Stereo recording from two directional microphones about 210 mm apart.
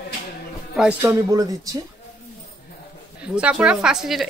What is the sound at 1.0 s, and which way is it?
Speech, 15° right (ahead or behind).